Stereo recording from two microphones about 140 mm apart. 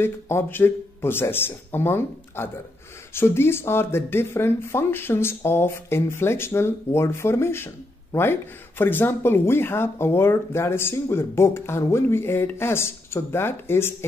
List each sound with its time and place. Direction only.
0.0 s speech: 15° left (ahead or behind)